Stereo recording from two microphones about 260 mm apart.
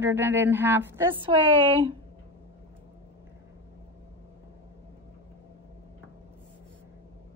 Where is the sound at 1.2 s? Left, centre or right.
Centre.